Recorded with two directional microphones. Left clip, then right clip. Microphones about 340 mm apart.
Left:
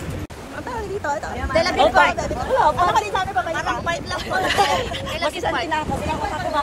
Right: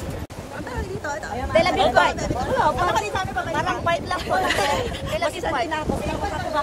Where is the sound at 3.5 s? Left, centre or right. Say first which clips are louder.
Right 1 dB; right.